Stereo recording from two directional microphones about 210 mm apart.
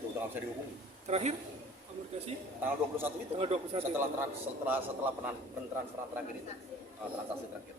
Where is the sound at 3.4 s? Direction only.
30° right (ahead or behind).